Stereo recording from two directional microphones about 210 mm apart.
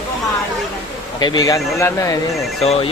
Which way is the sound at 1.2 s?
20° left (ahead or behind).